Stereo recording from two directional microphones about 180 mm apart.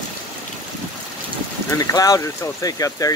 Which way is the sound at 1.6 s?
20° left (ahead or behind).